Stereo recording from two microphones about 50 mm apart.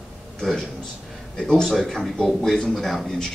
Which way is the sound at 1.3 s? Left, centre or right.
Centre.